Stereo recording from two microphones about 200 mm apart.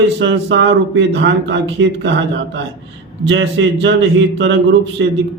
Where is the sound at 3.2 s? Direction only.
65° right (ahead or behind).